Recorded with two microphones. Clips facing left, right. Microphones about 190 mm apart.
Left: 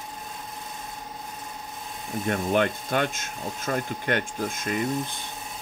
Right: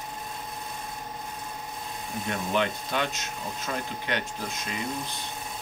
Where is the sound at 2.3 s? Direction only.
50° left (ahead or behind).